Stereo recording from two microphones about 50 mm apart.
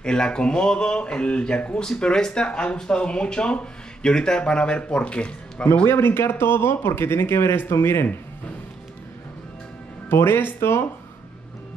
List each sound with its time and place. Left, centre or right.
0.0 s speech: centre
5.9 s speech: left
10.0 s speech: left